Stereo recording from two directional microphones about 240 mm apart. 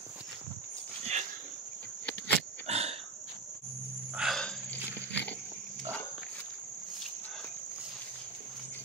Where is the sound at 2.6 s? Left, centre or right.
Right.